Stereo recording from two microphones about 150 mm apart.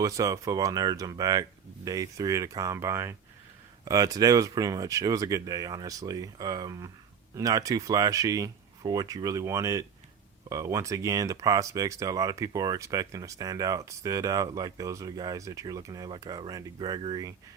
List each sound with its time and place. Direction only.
0.0 s speech: 20° right (ahead or behind)